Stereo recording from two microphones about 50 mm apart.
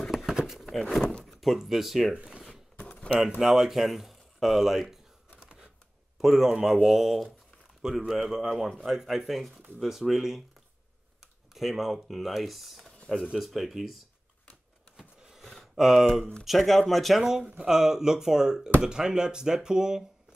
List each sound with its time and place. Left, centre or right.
0.1 s a sound: centre
0.6 s speech: centre
1.2 s door: centre
1.6 s speech: centre
2.9 s a sound: left
3.3 s speech: centre
5.4 s typewriter: centre
6.2 s speech: centre
11.5 s speech: centre
15.0 s a sound: centre
15.7 s speech: centre